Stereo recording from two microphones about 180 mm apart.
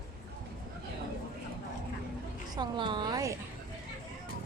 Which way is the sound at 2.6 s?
25° right (ahead or behind).